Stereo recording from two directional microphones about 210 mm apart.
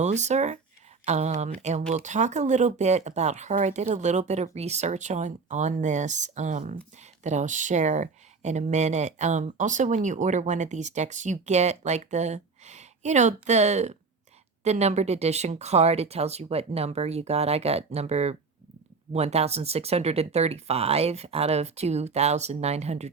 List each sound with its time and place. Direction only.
0.0 s speech: 35° right (ahead or behind)